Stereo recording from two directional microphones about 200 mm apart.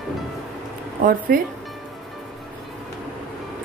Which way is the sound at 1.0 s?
45° right (ahead or behind).